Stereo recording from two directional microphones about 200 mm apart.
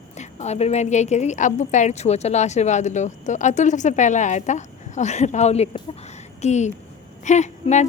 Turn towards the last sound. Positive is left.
turn(degrees=35)  # may be behind; listen again after turning